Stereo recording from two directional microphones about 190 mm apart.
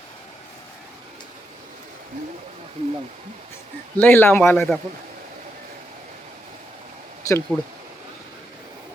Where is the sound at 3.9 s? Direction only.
10° left (ahead or behind).